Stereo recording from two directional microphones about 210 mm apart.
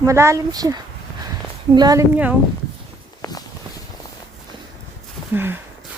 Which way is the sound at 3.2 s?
20° left (ahead or behind).